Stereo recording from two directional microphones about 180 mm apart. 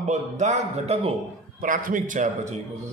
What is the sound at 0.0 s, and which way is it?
A man's voice, 40° right (ahead or behind).